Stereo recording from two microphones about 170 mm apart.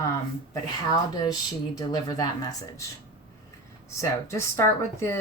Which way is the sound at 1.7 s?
25° left (ahead or behind).